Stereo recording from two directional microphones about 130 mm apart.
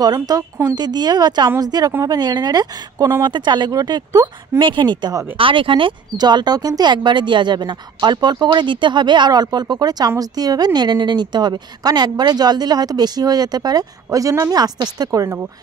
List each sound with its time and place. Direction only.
0.0 s a woman's voice: 30° right (ahead or behind)